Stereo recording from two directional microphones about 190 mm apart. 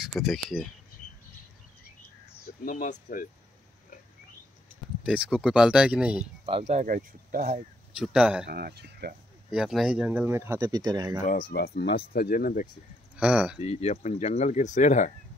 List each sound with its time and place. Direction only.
0.0 s speech: centre (ahead or behind)
2.6 s speech: 45° left (ahead or behind)
5.0 s speech: 5° right (ahead or behind)
6.4 s speech: 35° right (ahead or behind)
8.0 s speech: 5° right (ahead or behind)
8.5 s speech: 55° right (ahead or behind)
9.5 s speech: 5° right (ahead or behind); by 11.1 s 20° right (ahead or behind)
11.5 s speech: 55° left (ahead or behind)
13.1 s speech: 5° right (ahead or behind)
13.6 s speech: 35° left (ahead or behind)